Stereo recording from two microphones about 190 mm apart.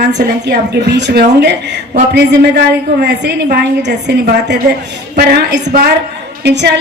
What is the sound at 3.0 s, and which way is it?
Speech, 60° right (ahead or behind).